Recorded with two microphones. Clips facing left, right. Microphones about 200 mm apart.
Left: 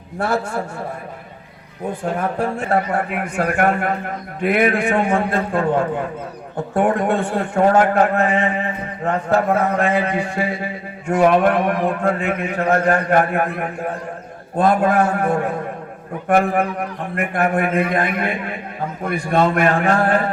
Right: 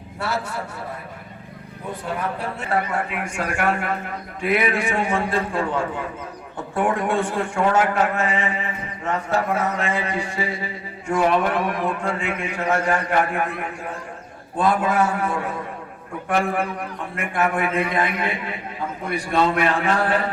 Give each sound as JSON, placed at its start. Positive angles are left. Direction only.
{"t": 0.2, "sound": "a man's voice", "side_deg": 50}
{"t": 2.0, "sound": "a man's voice", "side_deg": 50}
{"t": 6.7, "sound": "a man's voice", "side_deg": 40}
{"t": 8.1, "sound": "a man's voice", "side_deg": 60}
{"t": 12.9, "sound": "a man's voice", "side_deg": 45}
{"t": 14.5, "sound": "a man's voice", "side_deg": 45}
{"t": 14.8, "sound": "a man's voice", "side_deg": 60}
{"t": 17.5, "sound": "a man's voice", "side_deg": 45}